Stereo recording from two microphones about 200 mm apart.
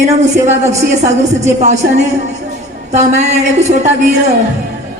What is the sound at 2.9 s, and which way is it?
Speech, 35° right (ahead or behind).